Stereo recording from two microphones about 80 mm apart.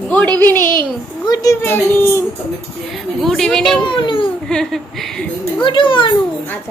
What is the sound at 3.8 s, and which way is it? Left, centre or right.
Speech, left.